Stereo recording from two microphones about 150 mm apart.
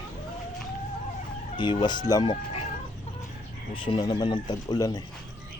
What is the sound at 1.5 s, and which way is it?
Speech, 30° left (ahead or behind).